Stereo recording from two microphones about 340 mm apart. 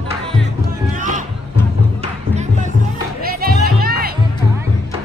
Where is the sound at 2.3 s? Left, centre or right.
Centre.